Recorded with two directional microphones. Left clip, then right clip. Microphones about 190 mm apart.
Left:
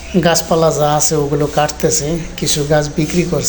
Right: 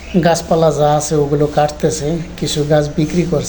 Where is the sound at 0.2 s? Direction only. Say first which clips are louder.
Even; 5° right (ahead or behind).